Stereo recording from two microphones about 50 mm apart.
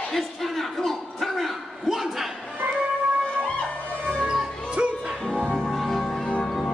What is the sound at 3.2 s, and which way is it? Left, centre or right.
Music, left.